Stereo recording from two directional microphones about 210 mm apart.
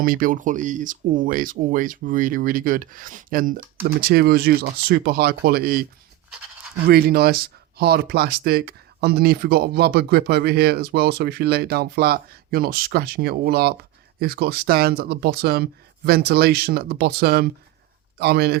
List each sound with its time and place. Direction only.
0.0 s speech: 40° right (ahead or behind)
6.8 s speech: 45° right (ahead or behind)